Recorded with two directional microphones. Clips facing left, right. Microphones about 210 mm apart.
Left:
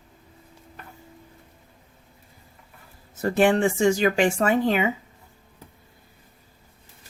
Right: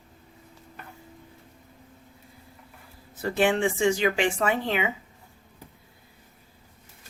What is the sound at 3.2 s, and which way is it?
Speech, 45° left (ahead or behind).